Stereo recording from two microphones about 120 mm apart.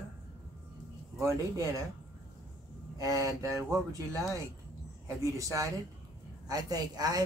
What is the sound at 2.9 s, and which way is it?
Speech, 25° right (ahead or behind).